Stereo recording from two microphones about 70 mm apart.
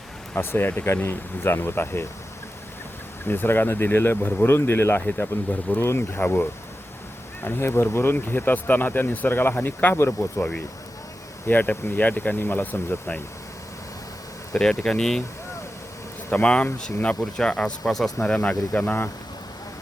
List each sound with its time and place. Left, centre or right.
0.3 s speech: left
3.2 s speech: left
14.5 s speech: centre
16.3 s speech: centre
18.2 s speech: centre